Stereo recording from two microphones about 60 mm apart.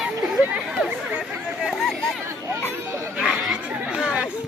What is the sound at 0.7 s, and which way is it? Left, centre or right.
Chatter, centre.